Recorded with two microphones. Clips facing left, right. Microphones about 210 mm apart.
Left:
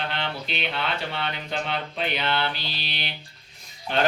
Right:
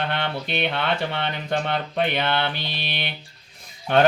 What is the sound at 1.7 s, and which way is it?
Mantra, 55° right (ahead or behind).